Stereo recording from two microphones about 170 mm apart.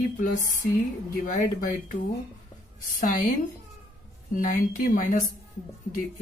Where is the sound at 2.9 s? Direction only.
50° left (ahead or behind).